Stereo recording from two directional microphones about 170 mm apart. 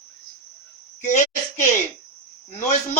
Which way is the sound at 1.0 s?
45° left (ahead or behind).